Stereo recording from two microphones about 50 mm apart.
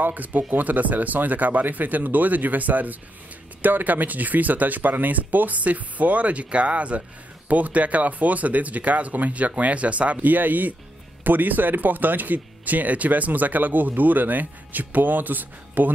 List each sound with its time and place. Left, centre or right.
0.0 s speech: right